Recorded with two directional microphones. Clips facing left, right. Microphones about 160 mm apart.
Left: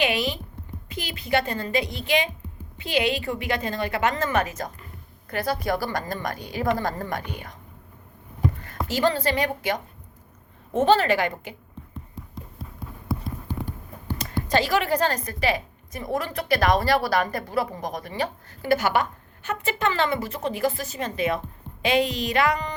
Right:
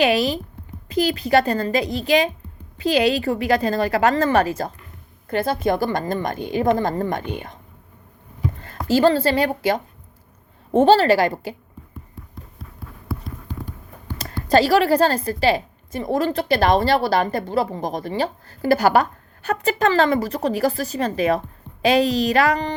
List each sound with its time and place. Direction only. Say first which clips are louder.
0.0 s a woman's voice: right 6 dB; 40° right (ahead or behind)
8.6 s a woman's voice: right 8 dB; 30° right (ahead or behind)
14.2 s a woman's voice: right 7 dB; 35° right (ahead or behind)